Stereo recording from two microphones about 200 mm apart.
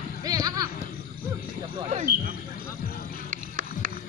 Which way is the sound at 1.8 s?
35° right (ahead or behind).